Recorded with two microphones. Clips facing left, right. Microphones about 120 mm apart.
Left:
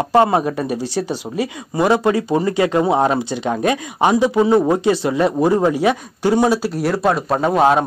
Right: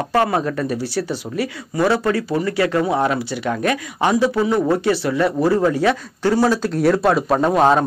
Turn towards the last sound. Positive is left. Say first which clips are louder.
# even
turn(degrees=5)  # may be behind; listen again after turning